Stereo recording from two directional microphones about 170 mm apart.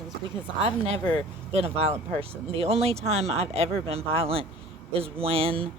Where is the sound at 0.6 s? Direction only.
35° right (ahead or behind).